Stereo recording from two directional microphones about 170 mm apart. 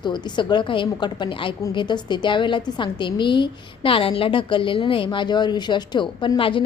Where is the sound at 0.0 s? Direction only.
25° left (ahead or behind).